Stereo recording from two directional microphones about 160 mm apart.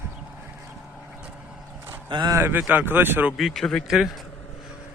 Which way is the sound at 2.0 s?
25° right (ahead or behind).